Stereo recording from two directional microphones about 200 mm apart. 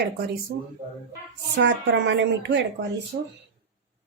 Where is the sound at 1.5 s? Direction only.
60° right (ahead or behind).